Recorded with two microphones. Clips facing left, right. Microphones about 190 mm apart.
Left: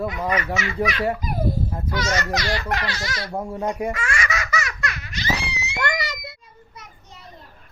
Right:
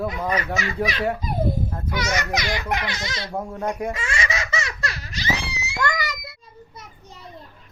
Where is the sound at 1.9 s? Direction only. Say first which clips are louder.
Left 1 dB; 15° right (ahead or behind).